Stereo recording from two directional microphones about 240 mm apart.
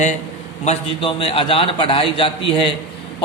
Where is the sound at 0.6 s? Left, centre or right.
Left.